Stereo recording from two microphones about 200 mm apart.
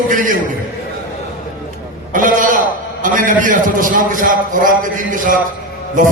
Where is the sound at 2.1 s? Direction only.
40° right (ahead or behind).